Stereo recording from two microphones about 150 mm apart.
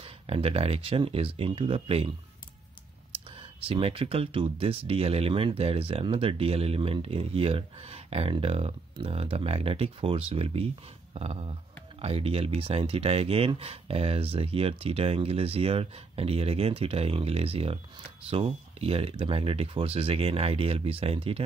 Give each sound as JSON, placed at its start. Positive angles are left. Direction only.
{"t": 0.0, "sound": "speech", "side_deg": -40}
{"t": 11.1, "sound": "a sound", "side_deg": -45}
{"t": 12.0, "sound": "speech", "side_deg": -40}